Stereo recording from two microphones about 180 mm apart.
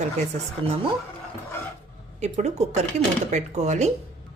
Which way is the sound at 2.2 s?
40° right (ahead or behind).